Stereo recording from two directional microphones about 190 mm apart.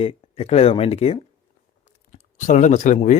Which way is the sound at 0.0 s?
30° left (ahead or behind).